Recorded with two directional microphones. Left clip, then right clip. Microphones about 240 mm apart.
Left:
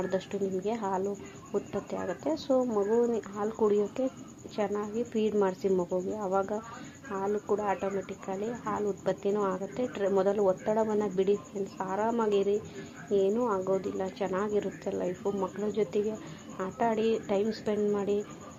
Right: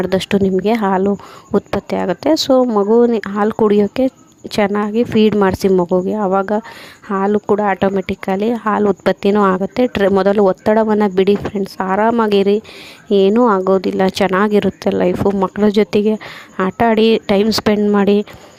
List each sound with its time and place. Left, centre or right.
0.1 s speech: right